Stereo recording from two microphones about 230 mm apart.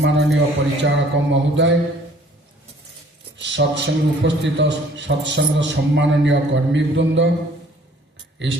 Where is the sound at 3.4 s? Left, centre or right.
Right.